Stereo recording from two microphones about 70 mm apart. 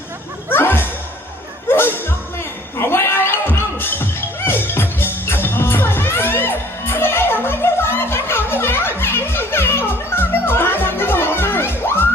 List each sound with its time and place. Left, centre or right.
0.5 s music: left